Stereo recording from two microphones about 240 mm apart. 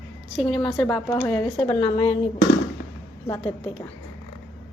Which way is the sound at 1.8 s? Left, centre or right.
Left.